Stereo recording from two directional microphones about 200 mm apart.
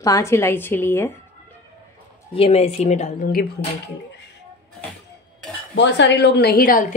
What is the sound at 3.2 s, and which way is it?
Speech, 50° left (ahead or behind).